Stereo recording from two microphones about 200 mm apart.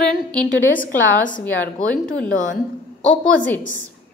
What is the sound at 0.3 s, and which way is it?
A woman's voice, 5° left (ahead or behind).